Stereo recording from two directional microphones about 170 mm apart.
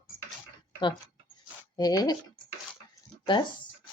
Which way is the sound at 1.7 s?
25° left (ahead or behind).